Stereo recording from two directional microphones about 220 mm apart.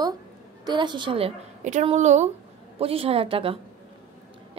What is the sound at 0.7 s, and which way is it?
Speech, 20° right (ahead or behind).